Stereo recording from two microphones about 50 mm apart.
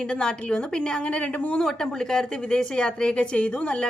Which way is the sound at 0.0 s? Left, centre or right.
Centre.